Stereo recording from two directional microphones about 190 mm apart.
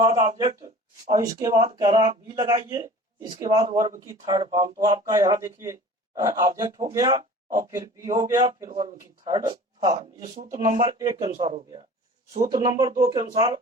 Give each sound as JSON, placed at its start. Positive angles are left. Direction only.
{"t": 0.0, "sound": "speech", "side_deg": -25}
{"t": 10.3, "sound": "speech", "side_deg": -40}
{"t": 10.7, "sound": "speech", "side_deg": -20}